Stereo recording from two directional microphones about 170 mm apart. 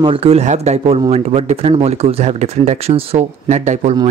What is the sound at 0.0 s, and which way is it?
Speech, 35° right (ahead or behind).